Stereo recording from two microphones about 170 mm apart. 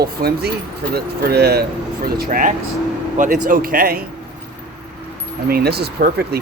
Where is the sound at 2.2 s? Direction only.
55° right (ahead or behind).